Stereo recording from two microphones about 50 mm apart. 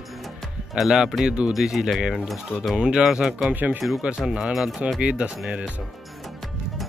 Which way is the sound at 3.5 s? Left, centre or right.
Right.